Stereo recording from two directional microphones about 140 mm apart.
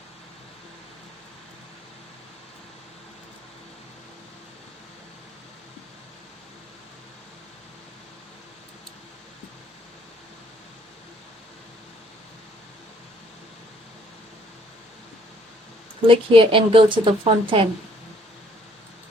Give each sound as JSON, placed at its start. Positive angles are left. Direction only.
{"t": 16.0, "sound": "a woman's voice", "side_deg": -40}